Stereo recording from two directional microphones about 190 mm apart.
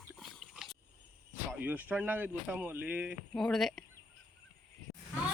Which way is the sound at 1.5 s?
10° right (ahead or behind).